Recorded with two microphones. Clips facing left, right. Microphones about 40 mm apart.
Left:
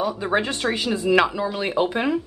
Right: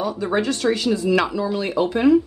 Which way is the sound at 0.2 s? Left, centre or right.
Left.